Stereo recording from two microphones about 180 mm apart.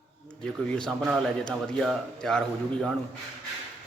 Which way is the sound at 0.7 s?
Centre (ahead or behind).